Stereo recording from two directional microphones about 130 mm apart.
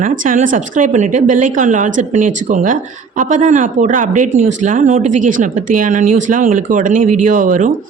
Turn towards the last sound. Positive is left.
turn(degrees=-85)